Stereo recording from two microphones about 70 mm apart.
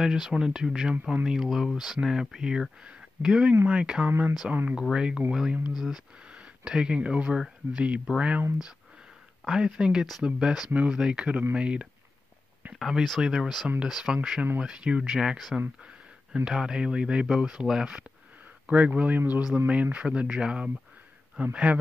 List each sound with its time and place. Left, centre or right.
0.0 s speech: centre
9.5 s speech: centre
12.7 s speech: centre